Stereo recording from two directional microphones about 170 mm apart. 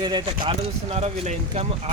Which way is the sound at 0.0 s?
25° right (ahead or behind).